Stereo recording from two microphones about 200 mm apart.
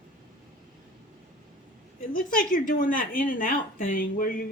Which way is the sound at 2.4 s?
40° left (ahead or behind).